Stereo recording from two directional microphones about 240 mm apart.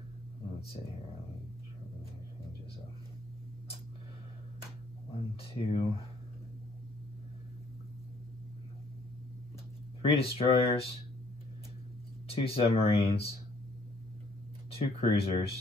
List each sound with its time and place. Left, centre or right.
5.4 s speech: left
10.0 s speech: left
12.3 s speech: left
14.7 s speech: left